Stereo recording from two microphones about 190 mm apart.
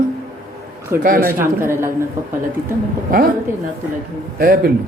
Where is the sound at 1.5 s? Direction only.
15° right (ahead or behind).